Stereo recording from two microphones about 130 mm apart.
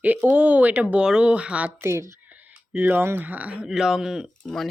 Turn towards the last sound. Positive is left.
turn(degrees=0)  # may be behind; listen again after turning